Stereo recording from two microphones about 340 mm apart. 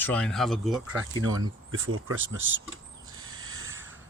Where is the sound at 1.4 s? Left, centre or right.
Right.